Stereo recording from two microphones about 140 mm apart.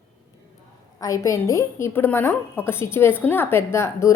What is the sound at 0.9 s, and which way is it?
A woman's voice, 25° left (ahead or behind).